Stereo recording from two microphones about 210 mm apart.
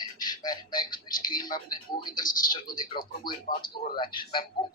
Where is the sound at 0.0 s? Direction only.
20° left (ahead or behind).